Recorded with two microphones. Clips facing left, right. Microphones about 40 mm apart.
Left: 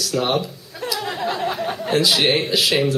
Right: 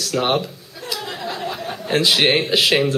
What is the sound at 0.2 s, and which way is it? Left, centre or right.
Speech, right.